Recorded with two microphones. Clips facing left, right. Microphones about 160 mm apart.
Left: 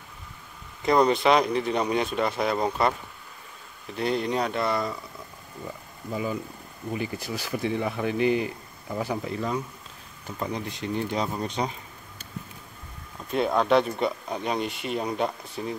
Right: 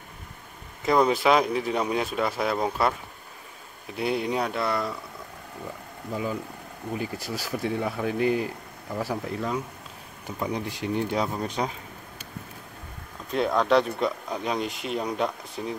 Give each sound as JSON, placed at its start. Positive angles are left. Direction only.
{"t": 0.8, "sound": "speech", "side_deg": -5}
{"t": 3.9, "sound": "speech", "side_deg": -5}
{"t": 6.9, "sound": "speech", "side_deg": 0}
{"t": 10.2, "sound": "speech", "side_deg": -15}
{"t": 13.3, "sound": "speech", "side_deg": 0}